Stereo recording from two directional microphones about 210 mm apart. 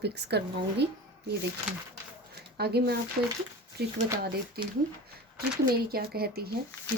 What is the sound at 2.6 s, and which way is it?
Speech, 50° right (ahead or behind).